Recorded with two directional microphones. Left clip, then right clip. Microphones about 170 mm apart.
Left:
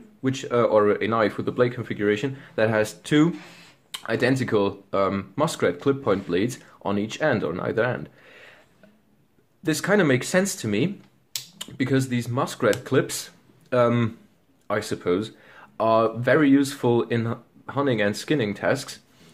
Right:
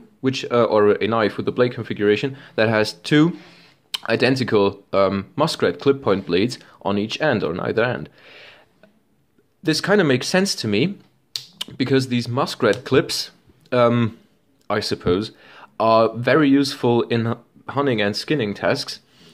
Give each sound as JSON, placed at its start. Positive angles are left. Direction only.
{"t": 0.2, "sound": "speech", "side_deg": -25}
{"t": 9.6, "sound": "speech", "side_deg": -20}